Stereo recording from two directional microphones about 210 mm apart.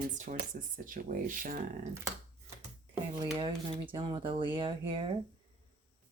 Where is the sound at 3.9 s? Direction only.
20° right (ahead or behind).